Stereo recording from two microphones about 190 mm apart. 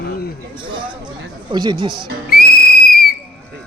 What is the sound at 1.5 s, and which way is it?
Speech, 20° right (ahead or behind).